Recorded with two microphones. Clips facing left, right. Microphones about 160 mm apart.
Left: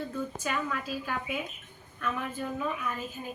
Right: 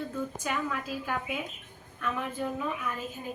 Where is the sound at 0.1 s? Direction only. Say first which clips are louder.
Even; 10° right (ahead or behind).